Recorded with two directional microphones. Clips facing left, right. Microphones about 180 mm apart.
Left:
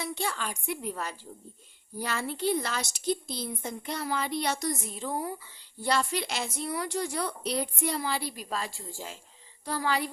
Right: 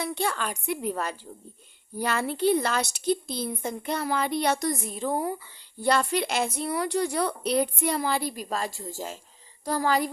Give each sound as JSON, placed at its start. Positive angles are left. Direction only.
{"t": 0.0, "sound": "a woman's voice", "side_deg": -60}